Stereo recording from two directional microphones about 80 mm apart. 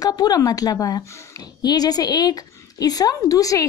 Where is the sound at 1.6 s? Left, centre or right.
Left.